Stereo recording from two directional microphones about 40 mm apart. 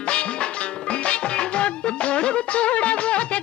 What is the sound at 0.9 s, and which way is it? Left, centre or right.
Music, left.